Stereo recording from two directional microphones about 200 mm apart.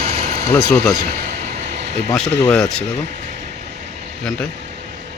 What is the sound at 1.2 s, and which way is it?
Vehicle, 55° right (ahead or behind).